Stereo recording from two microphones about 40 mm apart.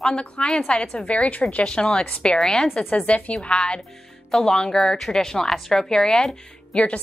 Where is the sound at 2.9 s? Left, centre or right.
Left; by 5.9 s centre.